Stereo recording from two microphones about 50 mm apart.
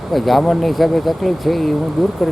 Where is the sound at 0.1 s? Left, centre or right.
Centre.